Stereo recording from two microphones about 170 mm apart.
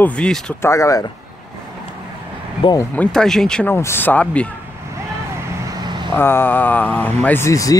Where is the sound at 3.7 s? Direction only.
15° left (ahead or behind).